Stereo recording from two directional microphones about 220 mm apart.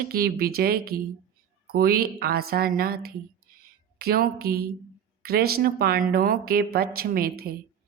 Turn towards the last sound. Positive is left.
turn(degrees=-45)  # may be behind; listen again after turning